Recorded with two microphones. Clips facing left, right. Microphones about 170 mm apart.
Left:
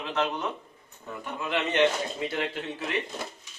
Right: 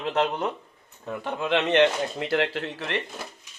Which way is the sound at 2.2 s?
75° right (ahead or behind).